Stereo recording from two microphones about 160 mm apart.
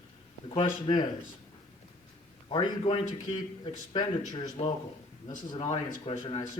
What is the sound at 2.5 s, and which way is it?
Speech, 35° left (ahead or behind).